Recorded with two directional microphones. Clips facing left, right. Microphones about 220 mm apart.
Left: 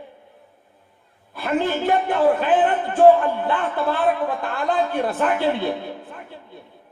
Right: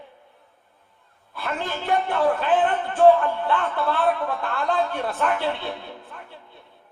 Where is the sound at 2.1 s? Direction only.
20° left (ahead or behind).